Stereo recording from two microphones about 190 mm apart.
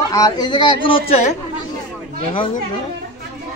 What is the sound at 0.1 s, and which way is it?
Speech, 20° left (ahead or behind).